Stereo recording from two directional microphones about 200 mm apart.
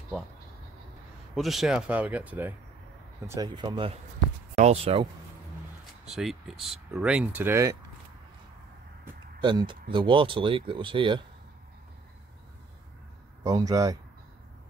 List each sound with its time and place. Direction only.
1.3 s speech: centre (ahead or behind)
3.3 s speech: 20° right (ahead or behind)
6.0 s speech: centre (ahead or behind)
9.4 s speech: 25° right (ahead or behind)
13.4 s speech: 15° right (ahead or behind)